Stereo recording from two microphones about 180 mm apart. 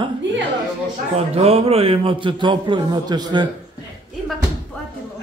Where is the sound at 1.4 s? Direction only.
35° right (ahead or behind).